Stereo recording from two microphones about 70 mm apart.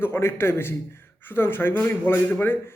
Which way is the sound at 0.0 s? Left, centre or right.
Left.